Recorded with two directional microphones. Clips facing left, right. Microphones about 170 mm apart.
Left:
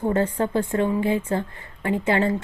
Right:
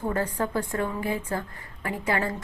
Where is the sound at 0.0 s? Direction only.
25° left (ahead or behind).